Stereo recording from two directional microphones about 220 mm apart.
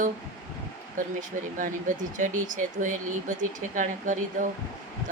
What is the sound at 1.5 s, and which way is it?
Speech, 35° right (ahead or behind).